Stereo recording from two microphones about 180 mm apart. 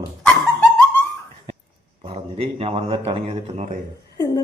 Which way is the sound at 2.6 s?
35° right (ahead or behind).